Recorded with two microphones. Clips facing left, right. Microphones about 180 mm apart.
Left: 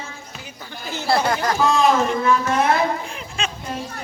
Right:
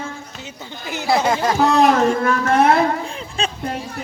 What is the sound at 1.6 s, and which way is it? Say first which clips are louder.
Speech: right 3 dB; 65° right (ahead or behind).